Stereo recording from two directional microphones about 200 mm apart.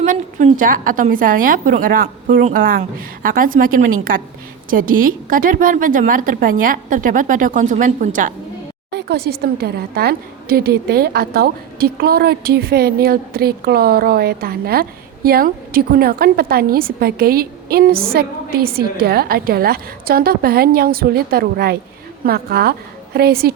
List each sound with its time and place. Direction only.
0.0 s a woman's voice: 40° right (ahead or behind)
8.9 s a woman's voice: 55° right (ahead or behind)